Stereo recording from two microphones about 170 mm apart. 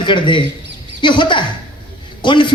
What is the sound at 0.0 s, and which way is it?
A woman's voice, 30° left (ahead or behind).